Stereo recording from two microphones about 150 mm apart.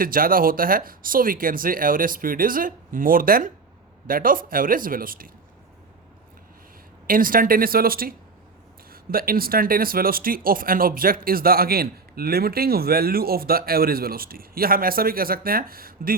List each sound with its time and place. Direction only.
0.0 s speech: 70° right (ahead or behind)
7.1 s speech: 70° right (ahead or behind)